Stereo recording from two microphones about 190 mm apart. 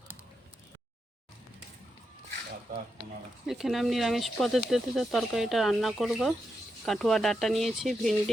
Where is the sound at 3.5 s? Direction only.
Centre (ahead or behind).